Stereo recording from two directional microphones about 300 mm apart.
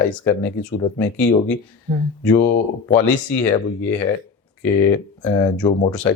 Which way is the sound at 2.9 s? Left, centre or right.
Centre.